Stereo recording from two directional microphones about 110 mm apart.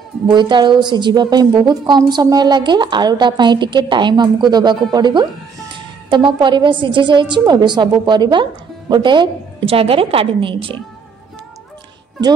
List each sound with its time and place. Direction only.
0.3 s a woman's voice: 45° right (ahead or behind)